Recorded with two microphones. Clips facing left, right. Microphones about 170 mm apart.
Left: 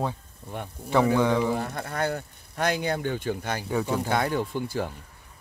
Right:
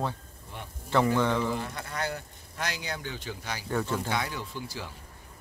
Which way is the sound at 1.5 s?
50° left (ahead or behind).